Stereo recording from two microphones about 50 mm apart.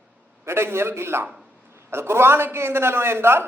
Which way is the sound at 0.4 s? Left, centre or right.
Right.